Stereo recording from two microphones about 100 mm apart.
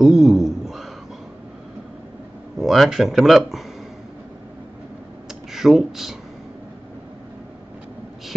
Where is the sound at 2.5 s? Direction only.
Centre (ahead or behind).